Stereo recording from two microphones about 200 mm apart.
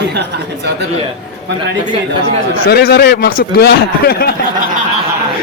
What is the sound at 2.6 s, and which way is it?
A man's voice, 50° left (ahead or behind).